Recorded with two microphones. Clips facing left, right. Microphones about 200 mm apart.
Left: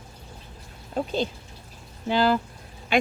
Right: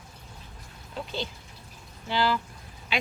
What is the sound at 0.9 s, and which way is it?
Speech, 50° left (ahead or behind).